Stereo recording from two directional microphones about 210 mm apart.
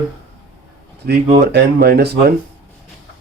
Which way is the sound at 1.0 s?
50° right (ahead or behind).